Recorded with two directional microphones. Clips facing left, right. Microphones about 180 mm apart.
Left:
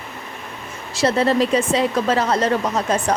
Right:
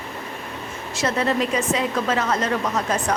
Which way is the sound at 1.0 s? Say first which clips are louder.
Left 5 dB; 35° left (ahead or behind).